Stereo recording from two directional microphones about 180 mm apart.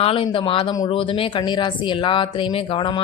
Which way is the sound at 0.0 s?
30° left (ahead or behind).